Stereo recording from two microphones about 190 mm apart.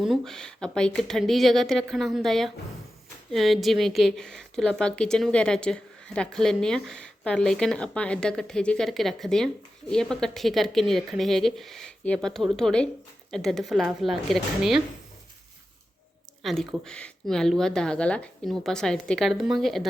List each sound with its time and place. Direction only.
0.0 s a woman's voice: centre (ahead or behind)
16.4 s a woman's voice: centre (ahead or behind)